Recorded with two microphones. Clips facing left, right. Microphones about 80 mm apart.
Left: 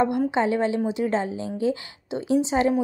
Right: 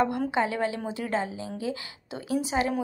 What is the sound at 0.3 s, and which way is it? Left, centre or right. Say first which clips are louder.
A woman's voice: left 4 dB; left.